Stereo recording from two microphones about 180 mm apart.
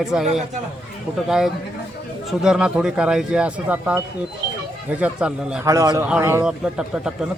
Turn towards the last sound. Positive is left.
turn(degrees=-5)  # may be behind; listen again after turning